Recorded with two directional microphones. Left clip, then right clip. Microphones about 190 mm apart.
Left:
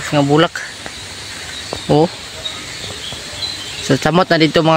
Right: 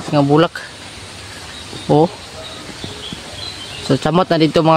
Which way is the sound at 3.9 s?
5° left (ahead or behind).